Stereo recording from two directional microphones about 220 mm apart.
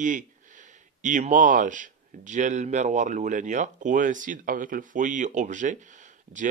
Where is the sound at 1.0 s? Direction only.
35° right (ahead or behind).